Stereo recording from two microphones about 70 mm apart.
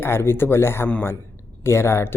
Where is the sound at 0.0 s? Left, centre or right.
Left.